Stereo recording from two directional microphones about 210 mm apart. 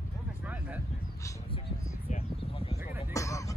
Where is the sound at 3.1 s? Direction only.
15° left (ahead or behind).